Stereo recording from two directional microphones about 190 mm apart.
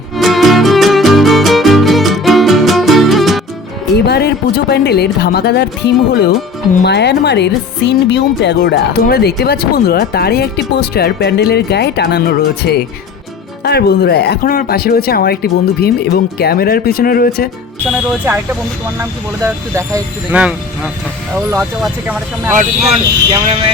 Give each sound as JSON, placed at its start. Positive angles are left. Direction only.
{"t": 0.2, "sound": "music", "side_deg": 0}
{"t": 3.9, "sound": "speech", "side_deg": 60}
{"t": 19.7, "sound": "speech", "side_deg": -10}
{"t": 22.9, "sound": "speech", "side_deg": -30}